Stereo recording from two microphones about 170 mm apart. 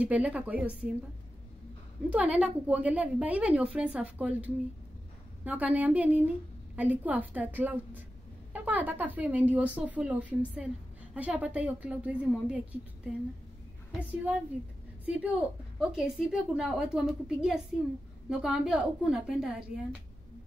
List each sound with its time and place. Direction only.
0.0 s a woman's voice: 10° right (ahead or behind)
2.0 s a woman's voice: 10° right (ahead or behind)